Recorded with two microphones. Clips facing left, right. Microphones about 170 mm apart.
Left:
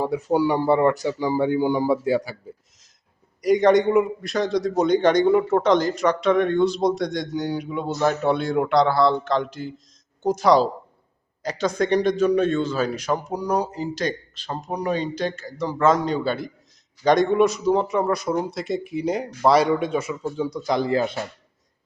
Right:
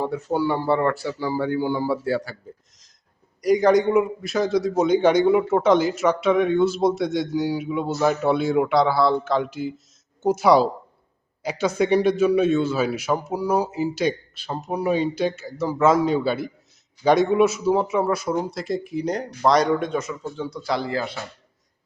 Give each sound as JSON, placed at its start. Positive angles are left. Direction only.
{"t": 0.0, "sound": "speech", "side_deg": 15}
{"t": 3.4, "sound": "a man's voice", "side_deg": 0}